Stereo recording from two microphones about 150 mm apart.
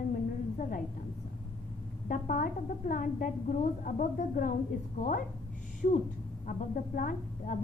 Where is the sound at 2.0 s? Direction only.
65° left (ahead or behind).